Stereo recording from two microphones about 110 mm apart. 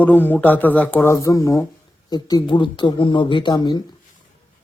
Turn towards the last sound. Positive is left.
turn(degrees=45)  # may be behind; listen again after turning